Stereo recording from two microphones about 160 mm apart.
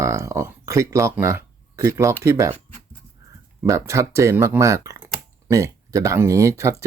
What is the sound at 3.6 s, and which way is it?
Speech, 20° right (ahead or behind).